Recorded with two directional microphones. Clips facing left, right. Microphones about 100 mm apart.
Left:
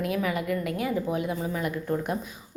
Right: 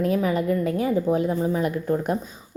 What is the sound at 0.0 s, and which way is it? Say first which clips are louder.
A woman's voice: right 6 dB; 35° right (ahead or behind).